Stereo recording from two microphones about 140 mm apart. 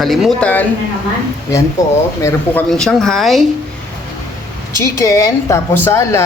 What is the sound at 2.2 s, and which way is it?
Speech, 20° left (ahead or behind).